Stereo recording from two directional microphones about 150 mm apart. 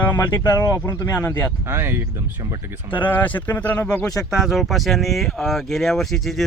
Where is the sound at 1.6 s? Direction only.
15° right (ahead or behind).